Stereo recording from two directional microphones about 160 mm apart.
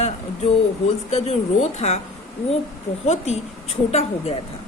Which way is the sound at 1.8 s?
45° left (ahead or behind).